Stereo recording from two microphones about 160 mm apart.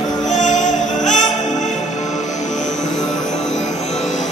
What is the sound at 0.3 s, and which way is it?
Music, 50° left (ahead or behind).